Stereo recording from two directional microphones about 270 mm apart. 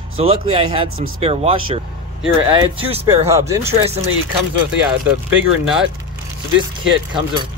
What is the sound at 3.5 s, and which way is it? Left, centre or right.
Speech, centre.